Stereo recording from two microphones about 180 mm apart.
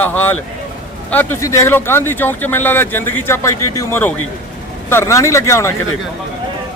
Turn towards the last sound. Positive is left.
turn(degrees=15)  # may be behind; listen again after turning